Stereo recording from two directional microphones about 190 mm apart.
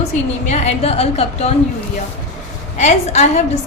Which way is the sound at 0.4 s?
35° left (ahead or behind).